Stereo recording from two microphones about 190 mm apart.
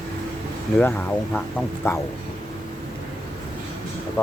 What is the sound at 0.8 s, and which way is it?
Speech, 10° left (ahead or behind).